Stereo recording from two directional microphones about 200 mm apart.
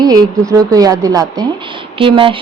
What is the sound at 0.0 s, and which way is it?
A woman's voice, 20° right (ahead or behind).